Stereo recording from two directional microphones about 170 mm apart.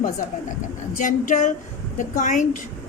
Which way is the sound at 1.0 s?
50° left (ahead or behind).